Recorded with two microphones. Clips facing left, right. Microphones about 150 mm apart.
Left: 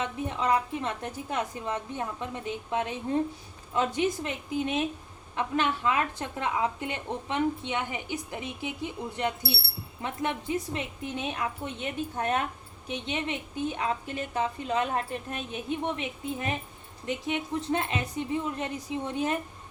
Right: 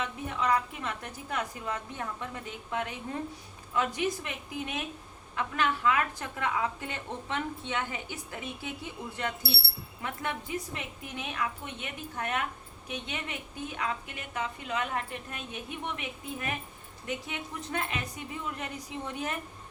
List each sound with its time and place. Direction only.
0.0 s a woman's voice: 25° left (ahead or behind)